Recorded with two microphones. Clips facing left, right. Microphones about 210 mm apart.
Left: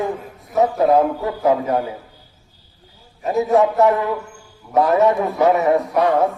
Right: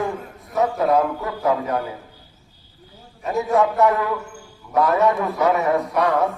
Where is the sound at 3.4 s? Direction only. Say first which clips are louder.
Left 3 dB; centre (ahead or behind).